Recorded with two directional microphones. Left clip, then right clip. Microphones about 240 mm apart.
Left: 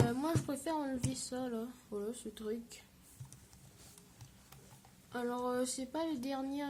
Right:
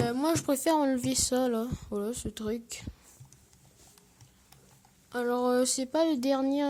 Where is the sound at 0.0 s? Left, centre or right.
Right.